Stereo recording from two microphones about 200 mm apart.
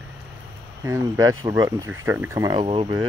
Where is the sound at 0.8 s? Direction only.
15° right (ahead or behind).